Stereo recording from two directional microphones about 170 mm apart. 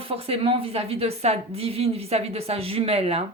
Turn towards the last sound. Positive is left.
turn(degrees=-35)  # may be behind; listen again after turning